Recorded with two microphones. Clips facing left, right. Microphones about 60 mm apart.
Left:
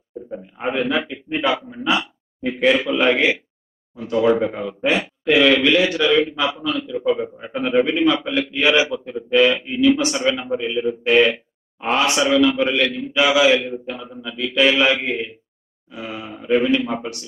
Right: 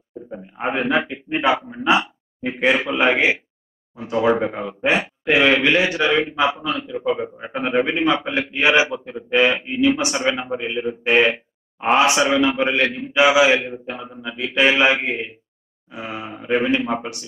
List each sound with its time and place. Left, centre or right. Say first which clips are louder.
0.7 s a man's voice: even; centre
0.9 s a man's voice: right 2 dB; right
7.1 s a man's voice: left 1 dB; centre
7.8 s a man's voice: left 1 dB; right